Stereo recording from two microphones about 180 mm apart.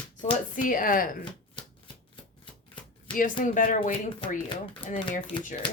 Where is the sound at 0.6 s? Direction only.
50° left (ahead or behind).